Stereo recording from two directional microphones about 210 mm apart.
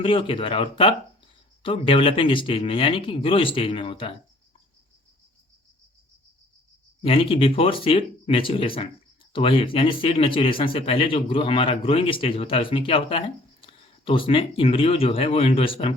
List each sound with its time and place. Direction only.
0.0 s speech: 25° left (ahead or behind)
7.0 s speech: 25° left (ahead or behind)